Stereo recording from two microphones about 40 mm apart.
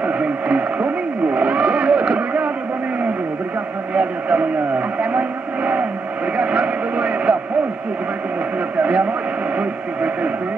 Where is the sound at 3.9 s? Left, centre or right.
Right.